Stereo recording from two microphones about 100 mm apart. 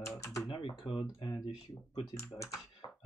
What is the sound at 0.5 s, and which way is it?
Typing, 60° left (ahead or behind).